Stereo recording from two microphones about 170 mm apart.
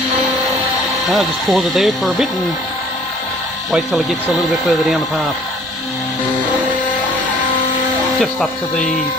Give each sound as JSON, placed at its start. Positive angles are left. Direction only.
{"t": 1.1, "sound": "speech", "side_deg": 0}
{"t": 3.7, "sound": "speech", "side_deg": 0}